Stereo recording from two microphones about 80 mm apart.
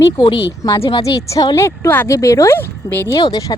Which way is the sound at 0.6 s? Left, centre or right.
Left.